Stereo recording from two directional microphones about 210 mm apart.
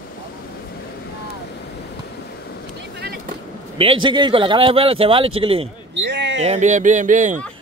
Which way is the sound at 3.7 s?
25° right (ahead or behind).